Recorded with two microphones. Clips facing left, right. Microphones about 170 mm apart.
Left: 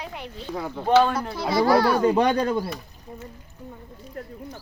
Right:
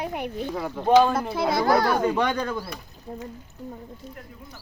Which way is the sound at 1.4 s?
50° right (ahead or behind).